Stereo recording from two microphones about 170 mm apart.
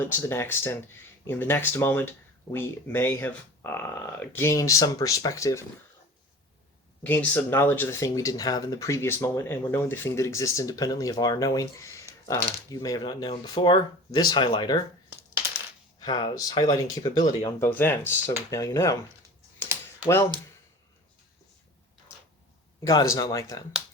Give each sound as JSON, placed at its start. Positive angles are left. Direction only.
{"t": 0.0, "sound": "speech", "side_deg": 15}
{"t": 7.0, "sound": "speech", "side_deg": 10}
{"t": 16.0, "sound": "speech", "side_deg": 25}
{"t": 17.7, "sound": "speech", "side_deg": 10}
{"t": 22.9, "sound": "speech", "side_deg": 20}